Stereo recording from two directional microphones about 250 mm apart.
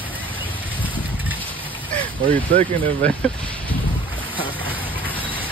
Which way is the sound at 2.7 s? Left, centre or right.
Right.